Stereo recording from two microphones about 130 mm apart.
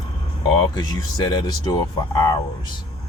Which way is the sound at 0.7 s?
35° left (ahead or behind).